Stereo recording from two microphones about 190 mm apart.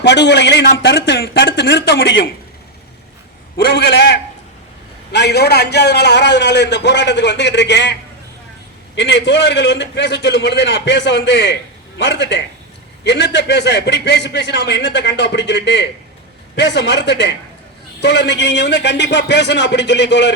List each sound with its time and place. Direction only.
0.0 s a man's voice: 65° left (ahead or behind)
3.8 s a man's voice: 65° left (ahead or behind)
9.0 s a man's voice: 65° left (ahead or behind)